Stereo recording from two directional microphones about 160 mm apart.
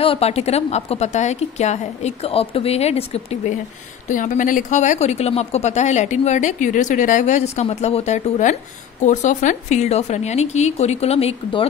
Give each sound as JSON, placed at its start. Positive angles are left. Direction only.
{"t": 0.0, "sound": "a woman's voice", "side_deg": 35}
{"t": 4.1, "sound": "speech", "side_deg": 55}